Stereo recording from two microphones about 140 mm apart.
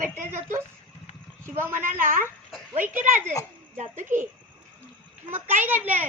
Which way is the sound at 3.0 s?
65° right (ahead or behind).